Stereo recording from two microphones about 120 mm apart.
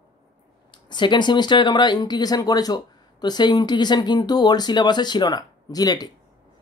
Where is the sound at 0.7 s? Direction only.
40° left (ahead or behind).